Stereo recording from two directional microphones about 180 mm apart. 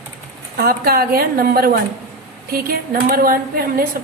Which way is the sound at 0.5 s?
55° right (ahead or behind).